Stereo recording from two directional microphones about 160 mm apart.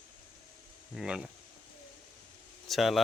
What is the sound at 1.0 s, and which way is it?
Speech, 5° right (ahead or behind).